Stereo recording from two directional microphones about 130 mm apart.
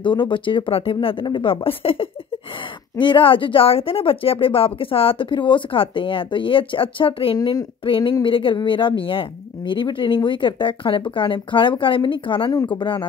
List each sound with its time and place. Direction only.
0.0 s a woman's voice: 35° left (ahead or behind)
7.3 s speech: 30° left (ahead or behind)
7.8 s a woman's voice: 40° left (ahead or behind)